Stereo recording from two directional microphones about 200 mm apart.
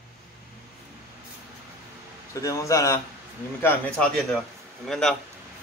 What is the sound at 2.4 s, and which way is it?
A man's voice, 15° left (ahead or behind).